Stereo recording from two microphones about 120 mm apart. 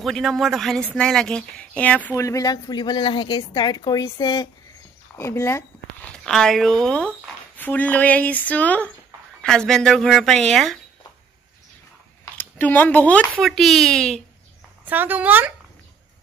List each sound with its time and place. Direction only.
0.0 s speech: centre (ahead or behind)
2.1 s a woman's voice: 25° left (ahead or behind)
5.1 s speech: 25° left (ahead or behind)
6.0 s speech: 5° left (ahead or behind)
12.4 s speech: 15° left (ahead or behind)
13.4 s speech: centre (ahead or behind)
14.9 s speech: 15° right (ahead or behind)